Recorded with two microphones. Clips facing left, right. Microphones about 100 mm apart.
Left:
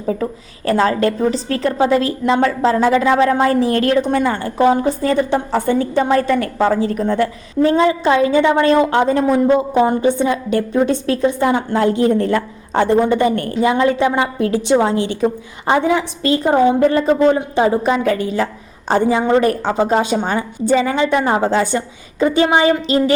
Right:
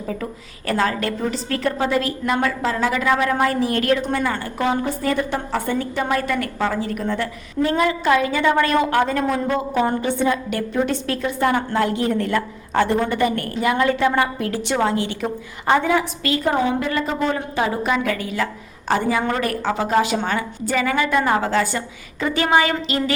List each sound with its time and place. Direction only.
0.0 s a woman's voice: 30° left (ahead or behind)